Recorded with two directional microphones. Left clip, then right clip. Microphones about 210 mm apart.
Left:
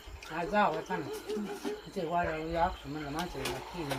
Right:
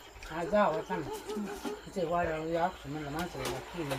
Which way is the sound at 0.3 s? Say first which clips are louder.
Right 1 dB; 25° left (ahead or behind).